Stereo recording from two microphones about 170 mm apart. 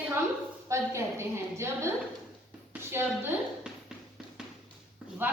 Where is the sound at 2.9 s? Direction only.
15° right (ahead or behind).